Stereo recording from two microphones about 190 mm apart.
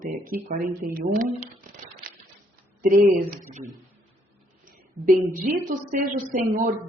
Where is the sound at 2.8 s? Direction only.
45° right (ahead or behind).